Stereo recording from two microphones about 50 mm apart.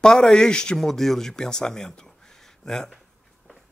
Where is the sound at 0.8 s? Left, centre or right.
Centre.